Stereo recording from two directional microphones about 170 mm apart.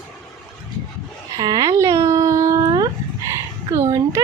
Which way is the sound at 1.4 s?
20° right (ahead or behind).